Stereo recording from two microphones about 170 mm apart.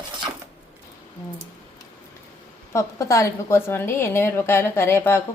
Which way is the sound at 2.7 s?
20° left (ahead or behind).